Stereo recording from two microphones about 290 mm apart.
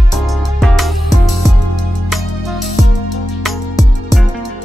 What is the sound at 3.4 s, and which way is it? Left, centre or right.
Music, centre.